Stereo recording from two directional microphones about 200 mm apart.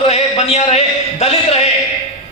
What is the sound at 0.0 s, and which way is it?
A man's voice, 30° left (ahead or behind).